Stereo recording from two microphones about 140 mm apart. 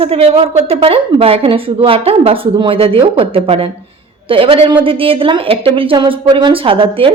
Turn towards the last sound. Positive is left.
turn(degrees=-40)  # may be behind; listen again after turning